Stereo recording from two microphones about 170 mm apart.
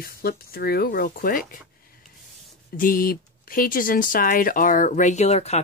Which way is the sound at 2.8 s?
55° left (ahead or behind).